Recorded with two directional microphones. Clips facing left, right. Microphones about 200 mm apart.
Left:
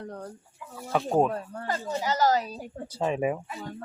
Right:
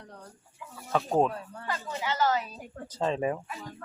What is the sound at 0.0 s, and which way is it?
Chicken, 50° left (ahead or behind).